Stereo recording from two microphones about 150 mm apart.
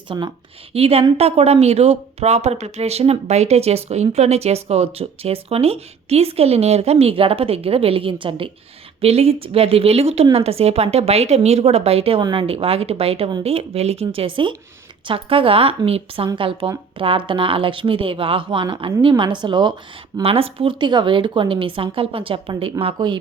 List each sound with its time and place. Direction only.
0.1 s speech: 35° right (ahead or behind)